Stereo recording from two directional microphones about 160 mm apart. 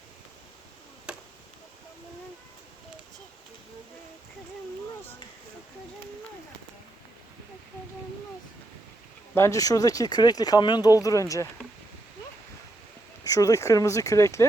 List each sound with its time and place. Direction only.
1.1 s chop: 5° right (ahead or behind)
9.3 s speech: 20° left (ahead or behind)
13.2 s speech: 20° left (ahead or behind)